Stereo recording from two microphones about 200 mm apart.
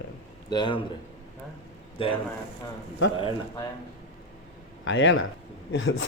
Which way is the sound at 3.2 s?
25° left (ahead or behind).